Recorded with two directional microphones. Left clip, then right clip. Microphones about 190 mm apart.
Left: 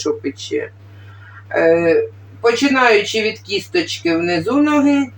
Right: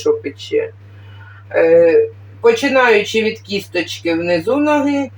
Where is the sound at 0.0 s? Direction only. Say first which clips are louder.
Right 4 dB; 40° left (ahead or behind).